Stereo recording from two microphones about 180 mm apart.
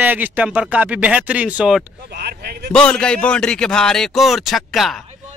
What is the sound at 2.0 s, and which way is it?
Speech, 65° right (ahead or behind).